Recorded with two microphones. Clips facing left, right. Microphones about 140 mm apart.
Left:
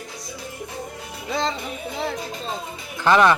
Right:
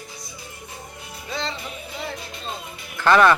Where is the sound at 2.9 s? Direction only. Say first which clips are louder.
Right 1 dB; 15° left (ahead or behind).